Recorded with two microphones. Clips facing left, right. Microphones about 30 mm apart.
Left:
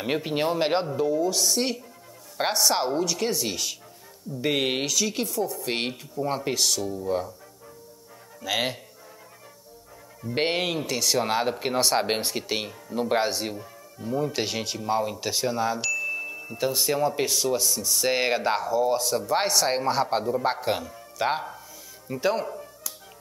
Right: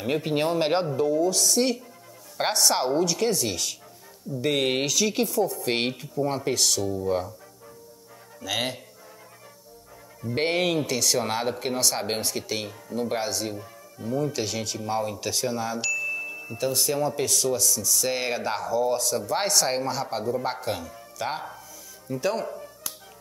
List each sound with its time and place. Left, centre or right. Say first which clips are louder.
0.2 s speech: right 1 dB; centre
6.2 s speech: even; centre
8.5 s speech: left 2 dB; centre
10.3 s speech: right 1 dB; centre
11.7 s speech: left 3 dB; left
13.6 s speech: even; centre
14.3 s speech: left 1 dB; left
14.8 s speech: left 3 dB; centre
15.8 s chime: even; centre
16.5 s speech: left 1 dB; centre
19.9 s speech: left 5 dB; left
20.2 s speech: left 2 dB; centre